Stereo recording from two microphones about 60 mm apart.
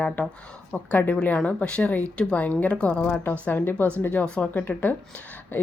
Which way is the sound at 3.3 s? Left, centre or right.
Left.